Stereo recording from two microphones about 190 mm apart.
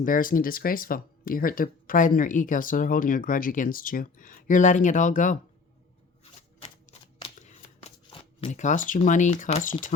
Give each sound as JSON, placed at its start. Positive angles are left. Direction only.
{"t": 0.0, "sound": "speech", "side_deg": 45}
{"t": 6.2, "sound": "shuffling cards", "side_deg": 30}